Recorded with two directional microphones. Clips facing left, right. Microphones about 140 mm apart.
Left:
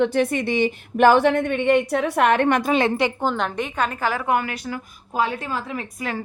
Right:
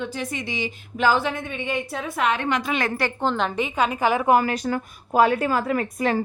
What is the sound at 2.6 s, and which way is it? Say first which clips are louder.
Speech: left 5 dB; 30° left (ahead or behind).